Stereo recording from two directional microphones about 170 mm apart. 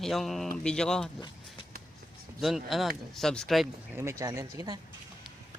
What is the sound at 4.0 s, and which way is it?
Speech, 15° right (ahead or behind).